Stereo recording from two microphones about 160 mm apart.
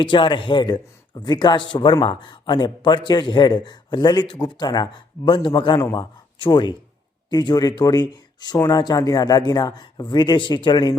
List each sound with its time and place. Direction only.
0.0 s a man's voice: 30° left (ahead or behind)